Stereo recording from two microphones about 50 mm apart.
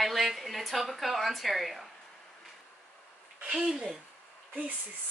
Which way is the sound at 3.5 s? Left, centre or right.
Centre.